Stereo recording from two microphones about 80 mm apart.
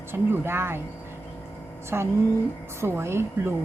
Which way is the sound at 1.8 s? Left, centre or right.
Right.